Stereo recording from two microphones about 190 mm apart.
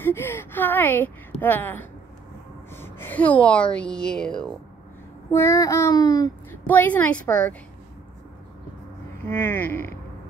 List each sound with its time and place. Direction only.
0.0 s a woman's voice: 10° left (ahead or behind)
5.3 s speech: 15° left (ahead or behind)
6.7 s speech: 10° left (ahead or behind)
9.2 s speech: 10° left (ahead or behind)